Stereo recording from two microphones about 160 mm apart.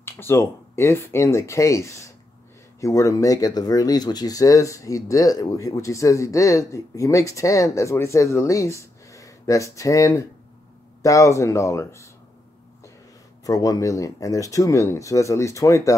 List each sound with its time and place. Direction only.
0.0 s speech: 15° left (ahead or behind)
13.4 s speech: 20° left (ahead or behind)